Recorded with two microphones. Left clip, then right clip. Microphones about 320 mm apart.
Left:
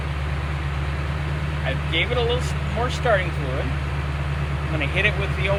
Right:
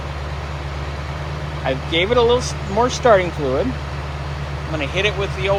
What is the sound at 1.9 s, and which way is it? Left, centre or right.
Speech, centre.